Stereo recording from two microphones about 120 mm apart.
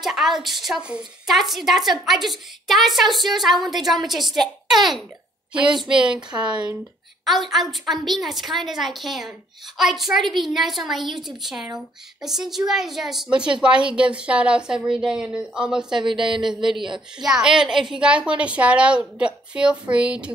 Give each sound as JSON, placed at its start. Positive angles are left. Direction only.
{"t": 0.0, "sound": "a woman's voice", "side_deg": 0}
{"t": 7.2, "sound": "a woman's voice", "side_deg": 0}
{"t": 16.0, "sound": "speech", "side_deg": -40}
{"t": 16.4, "sound": "a woman's voice", "side_deg": -5}